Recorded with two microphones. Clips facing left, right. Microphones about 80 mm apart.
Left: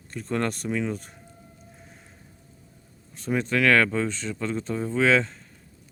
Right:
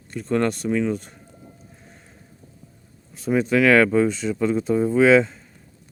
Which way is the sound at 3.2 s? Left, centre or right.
Centre.